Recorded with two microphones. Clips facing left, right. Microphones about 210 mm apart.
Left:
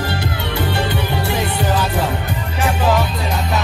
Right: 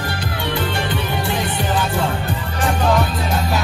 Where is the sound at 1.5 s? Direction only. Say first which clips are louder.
Left 2 dB; 20° right (ahead or behind).